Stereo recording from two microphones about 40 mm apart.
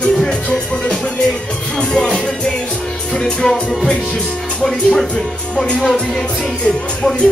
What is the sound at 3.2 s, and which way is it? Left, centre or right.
Music, centre.